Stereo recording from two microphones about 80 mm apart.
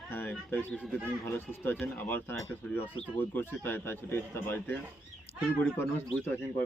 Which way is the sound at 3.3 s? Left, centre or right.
Left.